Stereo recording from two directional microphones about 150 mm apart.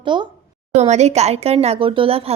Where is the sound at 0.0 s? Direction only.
30° right (ahead or behind).